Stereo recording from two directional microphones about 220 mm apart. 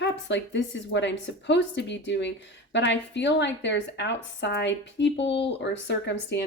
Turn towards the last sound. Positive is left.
turn(degrees=50)  # may be behind; listen again after turning